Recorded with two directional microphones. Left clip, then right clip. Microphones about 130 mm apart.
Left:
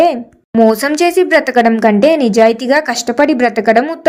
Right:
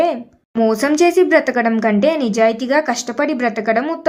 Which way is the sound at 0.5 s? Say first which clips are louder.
Left 5 dB; 30° left (ahead or behind).